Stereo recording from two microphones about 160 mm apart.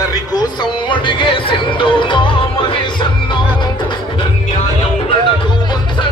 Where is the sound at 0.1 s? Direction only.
25° left (ahead or behind).